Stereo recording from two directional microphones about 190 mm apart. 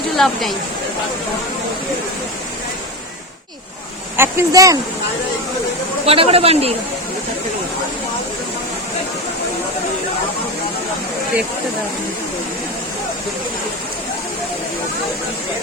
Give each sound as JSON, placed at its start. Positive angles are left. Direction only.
{"t": 0.2, "sound": "speech", "side_deg": 0}
{"t": 4.2, "sound": "speech", "side_deg": -15}
{"t": 6.1, "sound": "speech", "side_deg": -30}